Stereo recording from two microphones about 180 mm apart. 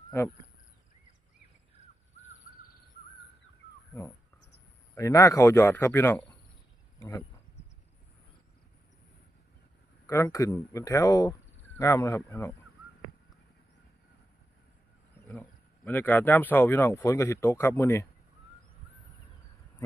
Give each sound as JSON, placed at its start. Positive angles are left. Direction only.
{"t": 4.9, "sound": "speech", "side_deg": 20}
{"t": 10.0, "sound": "speech", "side_deg": 15}
{"t": 15.2, "sound": "speech", "side_deg": 10}